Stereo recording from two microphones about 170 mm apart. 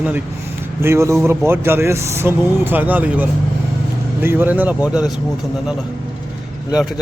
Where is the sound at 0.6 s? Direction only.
15° right (ahead or behind).